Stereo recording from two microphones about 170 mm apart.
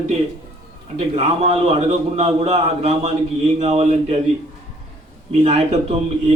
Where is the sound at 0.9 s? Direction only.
35° right (ahead or behind).